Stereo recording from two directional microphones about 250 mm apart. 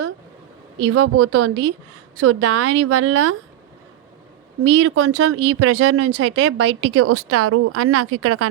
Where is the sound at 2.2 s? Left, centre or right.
Right.